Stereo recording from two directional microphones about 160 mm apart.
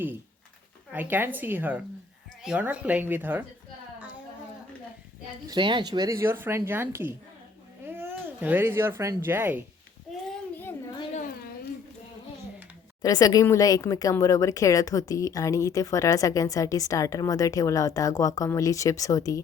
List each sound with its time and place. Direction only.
0.9 s speech: 10° right (ahead or behind)
5.5 s speech: 30° right (ahead or behind); by 9.6 s 10° right (ahead or behind)
13.0 s speech: 25° left (ahead or behind)